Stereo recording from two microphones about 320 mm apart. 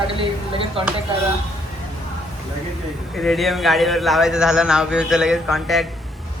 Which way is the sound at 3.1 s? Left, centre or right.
Centre.